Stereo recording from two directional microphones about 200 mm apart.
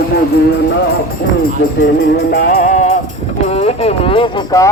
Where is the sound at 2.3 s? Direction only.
50° left (ahead or behind).